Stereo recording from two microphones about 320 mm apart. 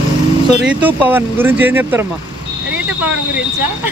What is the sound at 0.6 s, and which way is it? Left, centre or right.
Speech, centre.